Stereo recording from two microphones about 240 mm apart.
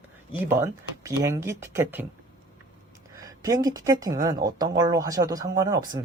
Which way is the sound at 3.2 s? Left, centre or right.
Centre.